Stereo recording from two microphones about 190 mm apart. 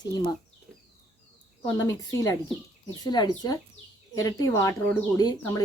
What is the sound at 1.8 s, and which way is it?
A woman's voice, 15° left (ahead or behind).